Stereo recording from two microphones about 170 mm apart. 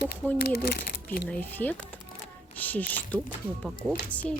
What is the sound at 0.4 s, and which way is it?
Speech, 65° left (ahead or behind).